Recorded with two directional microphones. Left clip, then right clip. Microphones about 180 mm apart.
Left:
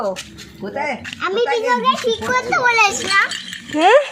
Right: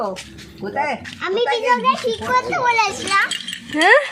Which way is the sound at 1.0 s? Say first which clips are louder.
Left 1 dB; 40° left (ahead or behind).